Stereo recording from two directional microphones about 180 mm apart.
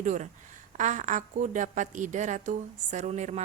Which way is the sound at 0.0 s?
45° right (ahead or behind).